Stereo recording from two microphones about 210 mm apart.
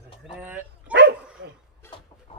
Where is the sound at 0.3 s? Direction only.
5° right (ahead or behind).